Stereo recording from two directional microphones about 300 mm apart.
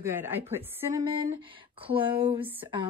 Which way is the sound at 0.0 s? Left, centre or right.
Centre.